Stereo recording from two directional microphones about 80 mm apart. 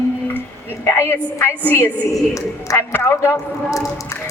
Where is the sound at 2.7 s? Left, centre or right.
Left.